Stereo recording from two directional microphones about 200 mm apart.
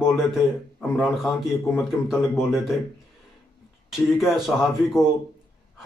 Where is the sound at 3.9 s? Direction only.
Centre (ahead or behind).